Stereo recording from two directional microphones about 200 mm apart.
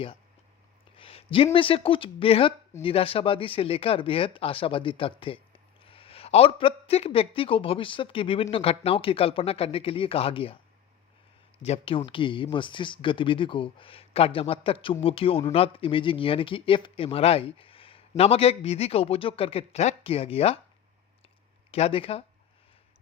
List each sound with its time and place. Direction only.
0.9 s a sound: 30° left (ahead or behind)
1.5 s speech: 25° left (ahead or behind)
11.6 s speech: 30° left (ahead or behind)
21.7 s speech: 30° left (ahead or behind)